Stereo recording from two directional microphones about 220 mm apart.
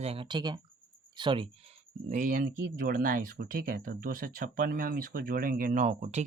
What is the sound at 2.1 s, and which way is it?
Speech, 35° right (ahead or behind).